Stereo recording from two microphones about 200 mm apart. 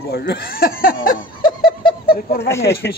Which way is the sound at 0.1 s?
55° left (ahead or behind).